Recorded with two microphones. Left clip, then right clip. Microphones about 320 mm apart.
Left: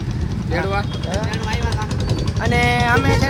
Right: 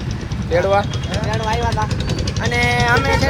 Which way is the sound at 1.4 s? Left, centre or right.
Centre.